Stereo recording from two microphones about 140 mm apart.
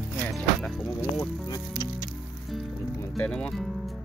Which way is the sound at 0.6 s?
5° left (ahead or behind).